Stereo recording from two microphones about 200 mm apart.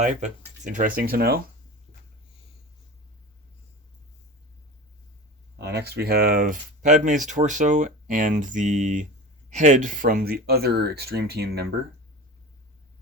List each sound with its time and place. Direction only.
0.0 s speech: 35° right (ahead or behind)
5.5 s speech: 55° right (ahead or behind)